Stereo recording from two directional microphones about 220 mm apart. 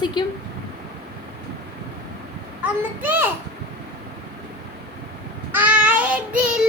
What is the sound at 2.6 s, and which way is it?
Speech, 10° right (ahead or behind).